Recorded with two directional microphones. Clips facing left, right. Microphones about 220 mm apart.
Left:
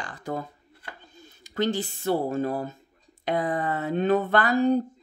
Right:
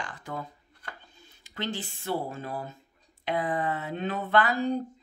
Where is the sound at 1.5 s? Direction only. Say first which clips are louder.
Left 8 dB; 40° left (ahead or behind).